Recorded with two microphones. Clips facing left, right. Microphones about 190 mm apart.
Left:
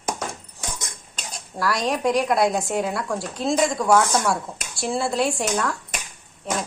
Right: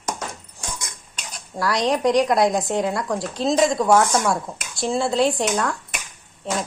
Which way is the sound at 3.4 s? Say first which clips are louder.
Right 3 dB; 20° right (ahead or behind).